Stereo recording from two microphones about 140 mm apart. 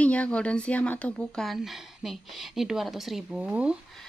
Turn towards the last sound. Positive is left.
turn(degrees=-5)  # may be behind; listen again after turning